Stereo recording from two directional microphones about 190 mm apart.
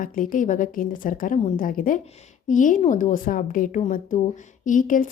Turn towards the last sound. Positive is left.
turn(degrees=45)  # may be behind; listen again after turning